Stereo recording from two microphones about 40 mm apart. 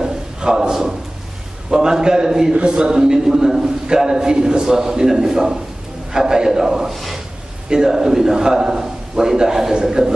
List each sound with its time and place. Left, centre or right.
0.0 s a sound: centre
1.7 s a man's voice: centre
2.5 s a man's voice: right
6.9 s speech: centre
7.7 s a man's voice: centre